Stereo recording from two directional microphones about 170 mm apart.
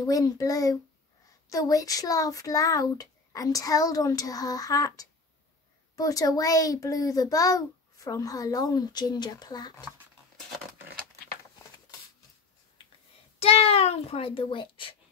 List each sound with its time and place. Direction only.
0.0 s a child's voice: 20° left (ahead or behind)
13.4 s a child's voice: 35° left (ahead or behind)